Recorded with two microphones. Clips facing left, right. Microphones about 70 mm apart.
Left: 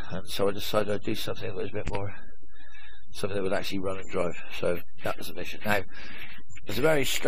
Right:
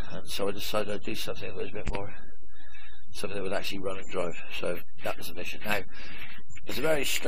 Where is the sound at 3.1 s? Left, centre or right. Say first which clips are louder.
Left 4 dB; left.